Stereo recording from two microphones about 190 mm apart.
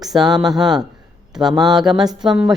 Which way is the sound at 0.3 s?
20° right (ahead or behind).